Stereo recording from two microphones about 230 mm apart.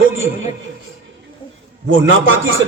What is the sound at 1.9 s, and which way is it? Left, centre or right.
Speech, right.